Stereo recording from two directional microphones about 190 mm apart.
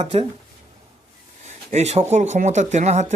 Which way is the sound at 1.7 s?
35° right (ahead or behind).